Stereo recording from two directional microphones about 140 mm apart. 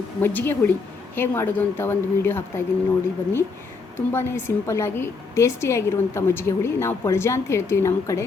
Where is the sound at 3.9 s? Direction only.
15° left (ahead or behind).